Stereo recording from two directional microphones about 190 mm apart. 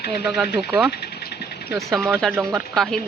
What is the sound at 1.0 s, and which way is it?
Vehicle, 60° left (ahead or behind).